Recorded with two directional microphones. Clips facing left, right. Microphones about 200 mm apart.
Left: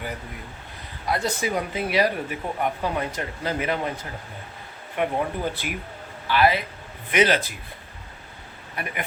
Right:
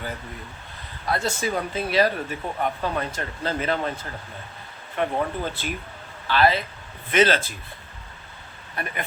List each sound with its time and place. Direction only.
1.0 s speech: 20° left (ahead or behind)
5.0 s speech: 15° left (ahead or behind)
8.7 s speech: 15° left (ahead or behind)